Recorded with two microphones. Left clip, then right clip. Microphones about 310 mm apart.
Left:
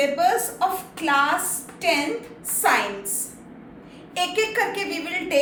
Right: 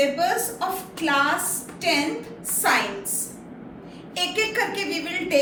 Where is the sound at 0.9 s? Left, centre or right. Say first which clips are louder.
Even; centre.